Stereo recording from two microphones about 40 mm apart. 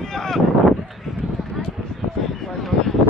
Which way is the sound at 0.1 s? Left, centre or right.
Centre.